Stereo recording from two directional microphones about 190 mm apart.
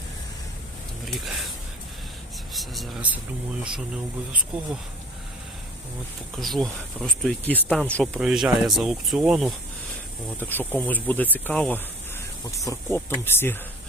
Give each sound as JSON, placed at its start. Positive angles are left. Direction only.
{"t": 1.0, "sound": "speech", "side_deg": 0}
{"t": 2.5, "sound": "a sound", "side_deg": 0}
{"t": 6.3, "sound": "speech", "side_deg": 0}
{"t": 10.4, "sound": "speech", "side_deg": 10}